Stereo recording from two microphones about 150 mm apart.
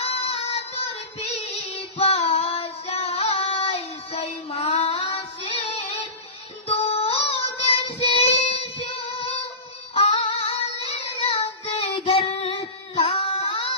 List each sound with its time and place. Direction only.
0.0 s child singing: 40° left (ahead or behind)
9.9 s female singing: 40° left (ahead or behind)
13.0 s child singing: 40° left (ahead or behind)